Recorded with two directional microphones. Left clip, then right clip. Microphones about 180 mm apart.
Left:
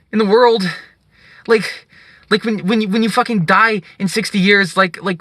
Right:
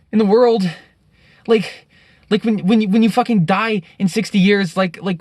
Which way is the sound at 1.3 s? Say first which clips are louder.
Left 2 dB; 20° right (ahead or behind).